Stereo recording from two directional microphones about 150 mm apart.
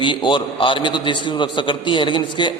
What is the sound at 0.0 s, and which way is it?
A man's voice, 35° left (ahead or behind).